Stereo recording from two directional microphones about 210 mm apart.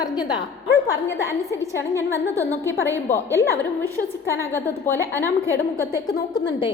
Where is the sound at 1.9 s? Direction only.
15° right (ahead or behind).